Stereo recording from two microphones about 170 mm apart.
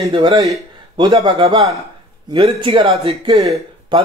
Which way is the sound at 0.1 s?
30° right (ahead or behind).